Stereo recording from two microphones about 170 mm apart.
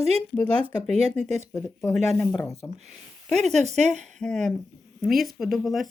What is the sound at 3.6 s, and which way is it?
Speech, 40° right (ahead or behind).